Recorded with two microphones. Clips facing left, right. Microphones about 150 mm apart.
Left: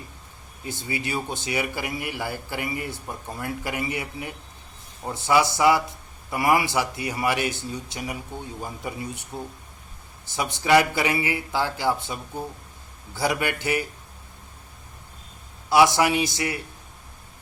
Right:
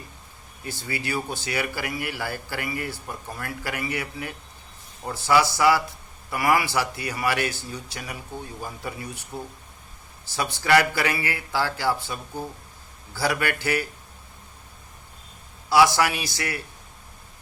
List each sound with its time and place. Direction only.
0.6 s speech: 20° left (ahead or behind)
15.7 s speech: 20° left (ahead or behind)